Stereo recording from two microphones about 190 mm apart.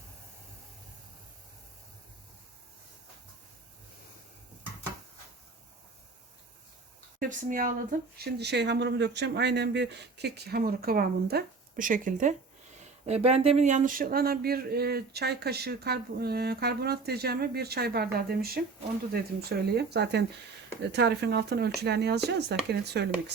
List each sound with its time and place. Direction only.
7.2 s speech: 45° right (ahead or behind)
13.1 s speech: 35° right (ahead or behind); by 23.3 s 60° right (ahead or behind)